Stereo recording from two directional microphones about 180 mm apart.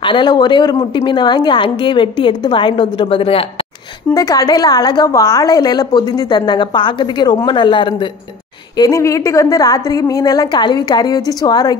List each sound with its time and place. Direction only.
0.0 s a woman's voice: 25° left (ahead or behind)
4.1 s a woman's voice: 20° left (ahead or behind)